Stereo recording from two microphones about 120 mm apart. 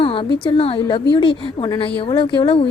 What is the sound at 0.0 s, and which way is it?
A woman's voice, 45° left (ahead or behind).